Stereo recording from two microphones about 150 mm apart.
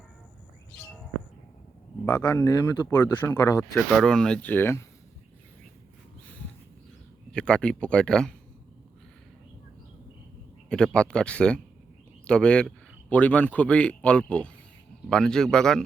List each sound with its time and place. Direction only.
2.0 s speech: 10° left (ahead or behind)
2.4 s speech: 25° left (ahead or behind)
3.6 s speech: 5° left (ahead or behind)
7.3 s speech: 5° left (ahead or behind)
10.7 s speech: 5° left (ahead or behind)